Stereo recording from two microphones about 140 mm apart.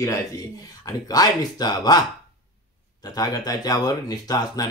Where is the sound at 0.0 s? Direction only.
20° left (ahead or behind).